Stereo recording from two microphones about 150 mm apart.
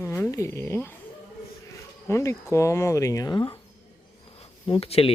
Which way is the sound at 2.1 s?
20° left (ahead or behind).